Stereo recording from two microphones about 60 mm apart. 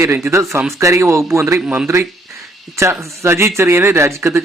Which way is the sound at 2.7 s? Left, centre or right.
Right.